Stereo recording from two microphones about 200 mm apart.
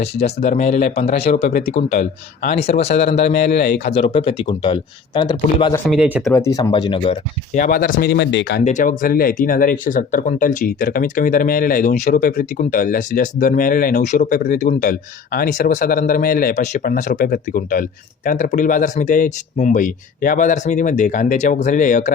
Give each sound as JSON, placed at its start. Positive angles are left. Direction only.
{"t": 0.0, "sound": "speech", "side_deg": 35}
{"t": 3.6, "sound": "speech", "side_deg": 50}
{"t": 3.9, "sound": "speech", "side_deg": 25}
{"t": 5.7, "sound": "speech", "side_deg": 5}
{"t": 6.0, "sound": "speech", "side_deg": -5}
{"t": 6.3, "sound": "speech", "side_deg": 15}
{"t": 7.5, "sound": "speech", "side_deg": 40}
{"t": 8.6, "sound": "speech", "side_deg": 40}